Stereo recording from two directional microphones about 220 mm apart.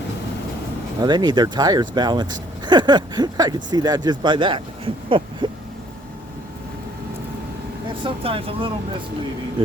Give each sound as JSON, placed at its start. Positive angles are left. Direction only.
{"t": 1.0, "sound": "speech", "side_deg": -20}
{"t": 5.0, "sound": "a sound", "side_deg": -25}
{"t": 8.0, "sound": "speech", "side_deg": -25}